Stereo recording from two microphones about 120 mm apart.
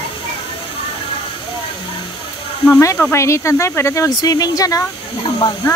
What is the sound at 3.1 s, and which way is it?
Speech, 25° left (ahead or behind).